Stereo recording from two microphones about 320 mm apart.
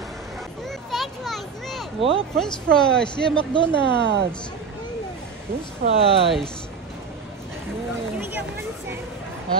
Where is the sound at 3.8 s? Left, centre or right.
Right.